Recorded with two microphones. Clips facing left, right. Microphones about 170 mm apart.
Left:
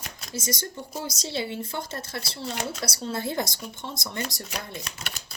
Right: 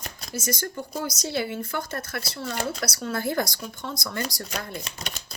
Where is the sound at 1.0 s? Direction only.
25° left (ahead or behind).